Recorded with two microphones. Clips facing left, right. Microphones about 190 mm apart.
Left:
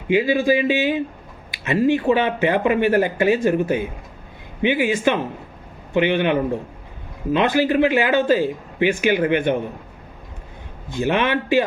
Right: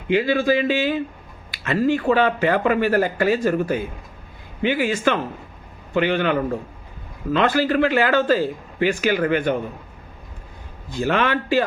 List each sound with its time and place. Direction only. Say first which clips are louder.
0.1 s a man's voice: left 1 dB; 15° left (ahead or behind)
10.8 s speech: left 1 dB; 20° left (ahead or behind)